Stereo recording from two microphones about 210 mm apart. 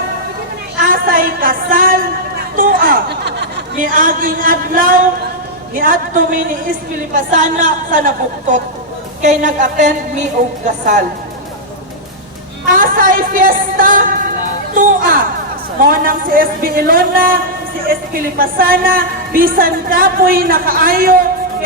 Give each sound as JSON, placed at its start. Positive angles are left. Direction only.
{"t": 0.9, "sound": "a sound", "side_deg": -40}
{"t": 5.7, "sound": "a woman's voice", "side_deg": -40}
{"t": 12.6, "sound": "a woman's voice", "side_deg": -40}